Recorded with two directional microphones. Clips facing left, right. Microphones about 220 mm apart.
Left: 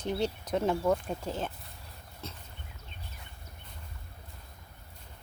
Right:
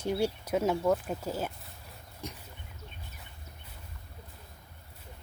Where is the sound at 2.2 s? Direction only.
15° right (ahead or behind).